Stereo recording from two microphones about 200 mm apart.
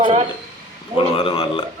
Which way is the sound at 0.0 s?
30° right (ahead or behind).